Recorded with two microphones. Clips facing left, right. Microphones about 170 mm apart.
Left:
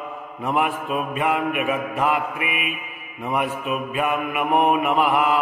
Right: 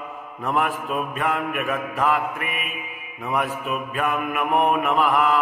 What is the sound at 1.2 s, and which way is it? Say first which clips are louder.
Mantra: left 4 dB; 15° left (ahead or behind).